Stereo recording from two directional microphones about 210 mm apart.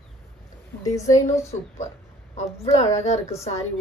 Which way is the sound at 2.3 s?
35° left (ahead or behind).